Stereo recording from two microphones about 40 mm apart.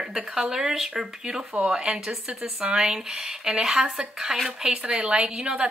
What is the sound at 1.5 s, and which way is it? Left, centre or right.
A woman's voice, right.